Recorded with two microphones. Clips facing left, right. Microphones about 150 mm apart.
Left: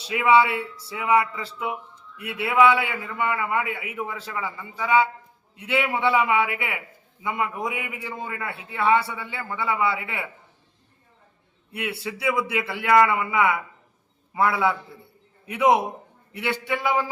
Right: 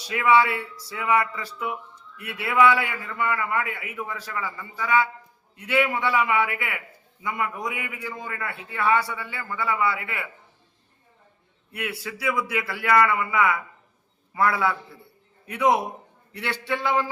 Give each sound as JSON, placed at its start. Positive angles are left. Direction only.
{"t": 0.1, "sound": "a man's voice", "side_deg": 20}
{"t": 11.7, "sound": "a man's voice", "side_deg": 25}